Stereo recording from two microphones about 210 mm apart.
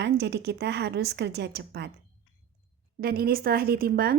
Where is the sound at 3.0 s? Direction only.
45° right (ahead or behind).